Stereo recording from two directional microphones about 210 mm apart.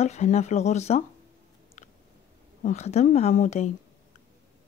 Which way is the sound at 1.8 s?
35° left (ahead or behind).